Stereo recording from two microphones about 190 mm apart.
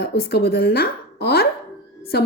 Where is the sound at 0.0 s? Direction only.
60° left (ahead or behind).